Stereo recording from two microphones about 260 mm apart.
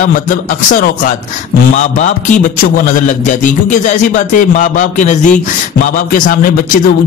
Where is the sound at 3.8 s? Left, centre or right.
Left.